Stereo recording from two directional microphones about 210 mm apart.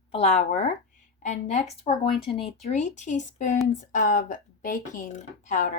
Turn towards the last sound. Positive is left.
turn(degrees=35)  # may be behind; listen again after turning